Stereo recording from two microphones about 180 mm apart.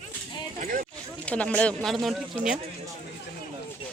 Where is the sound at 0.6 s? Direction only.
45° right (ahead or behind).